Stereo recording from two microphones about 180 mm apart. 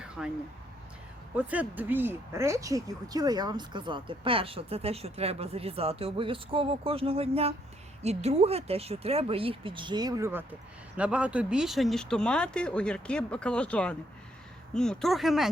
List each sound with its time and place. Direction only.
0.2 s speech: 5° right (ahead or behind)
1.4 s speech: 10° right (ahead or behind)